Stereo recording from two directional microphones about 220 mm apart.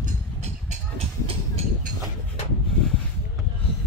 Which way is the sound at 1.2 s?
30° right (ahead or behind).